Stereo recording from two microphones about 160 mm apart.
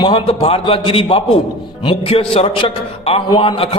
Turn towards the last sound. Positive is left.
turn(degrees=35)  # may be behind; listen again after turning